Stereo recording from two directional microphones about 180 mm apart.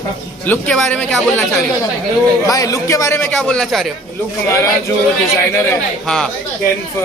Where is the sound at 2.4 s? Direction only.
20° left (ahead or behind).